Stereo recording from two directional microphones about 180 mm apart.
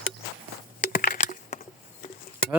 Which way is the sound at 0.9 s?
50° left (ahead or behind).